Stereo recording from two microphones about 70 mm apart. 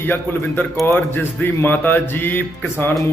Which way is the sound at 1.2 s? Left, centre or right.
Left.